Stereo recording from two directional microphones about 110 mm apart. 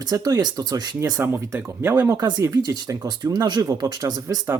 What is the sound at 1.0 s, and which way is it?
Speech, 25° right (ahead or behind).